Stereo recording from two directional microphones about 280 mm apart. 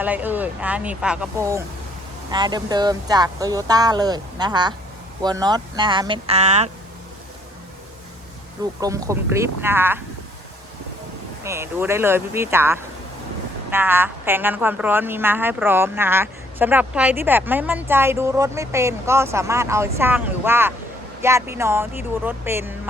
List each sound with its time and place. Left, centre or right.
0.0 s a woman's voice: centre; by 6.7 s right
8.8 s a woman's voice: centre
11.4 s a woman's voice: centre